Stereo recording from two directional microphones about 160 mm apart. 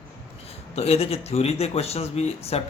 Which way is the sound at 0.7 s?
40° left (ahead or behind).